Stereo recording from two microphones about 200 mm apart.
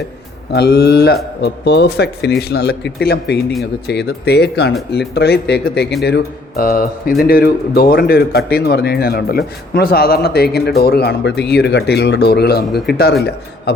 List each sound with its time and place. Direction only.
0.5 s speech: 55° left (ahead or behind)